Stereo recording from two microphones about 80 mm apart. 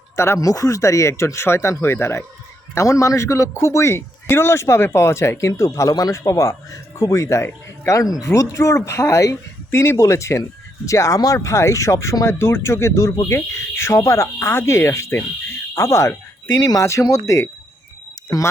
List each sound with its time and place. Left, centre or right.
0.3 s a man's voice: left
16.6 s a man's voice: left